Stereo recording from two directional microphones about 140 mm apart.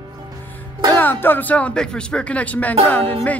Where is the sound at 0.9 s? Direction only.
15° left (ahead or behind).